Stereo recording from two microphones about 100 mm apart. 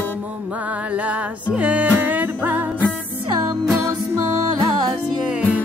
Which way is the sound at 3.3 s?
35° right (ahead or behind).